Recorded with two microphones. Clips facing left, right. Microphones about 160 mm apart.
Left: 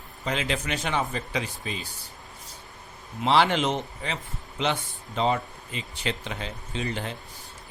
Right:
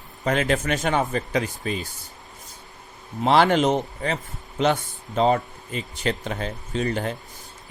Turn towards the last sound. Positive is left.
turn(degrees=-45)  # may be behind; listen again after turning